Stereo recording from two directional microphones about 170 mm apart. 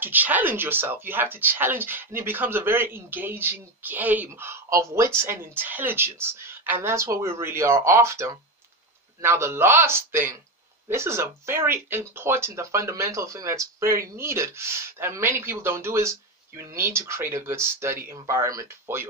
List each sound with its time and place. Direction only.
0.0 s speech: 10° right (ahead or behind)